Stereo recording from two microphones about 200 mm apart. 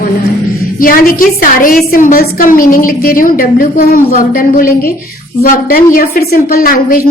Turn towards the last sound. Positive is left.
turn(degrees=45)  # may be behind; listen again after turning